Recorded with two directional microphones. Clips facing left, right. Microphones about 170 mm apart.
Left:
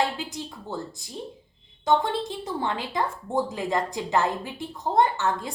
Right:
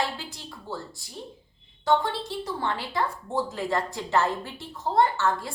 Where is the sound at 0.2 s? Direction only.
20° left (ahead or behind).